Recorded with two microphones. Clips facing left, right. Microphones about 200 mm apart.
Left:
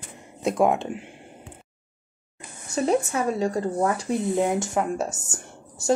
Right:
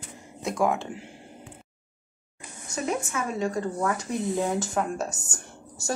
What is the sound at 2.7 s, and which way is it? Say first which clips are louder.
A woman's voice: left 6 dB; 35° left (ahead or behind).